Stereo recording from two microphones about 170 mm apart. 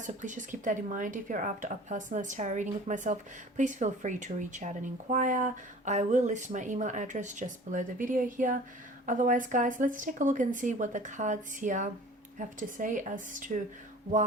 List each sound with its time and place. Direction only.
0.0 s speech: 45° right (ahead or behind)